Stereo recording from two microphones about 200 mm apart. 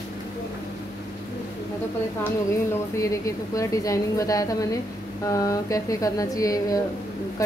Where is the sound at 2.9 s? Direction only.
15° left (ahead or behind).